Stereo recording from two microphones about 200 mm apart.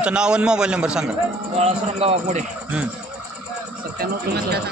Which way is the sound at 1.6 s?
30° right (ahead or behind).